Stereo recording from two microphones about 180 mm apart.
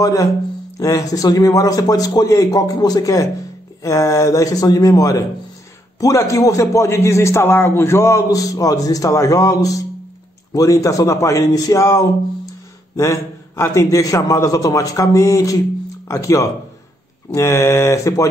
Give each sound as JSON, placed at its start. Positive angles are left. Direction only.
{"t": 0.0, "sound": "a man's voice", "side_deg": 20}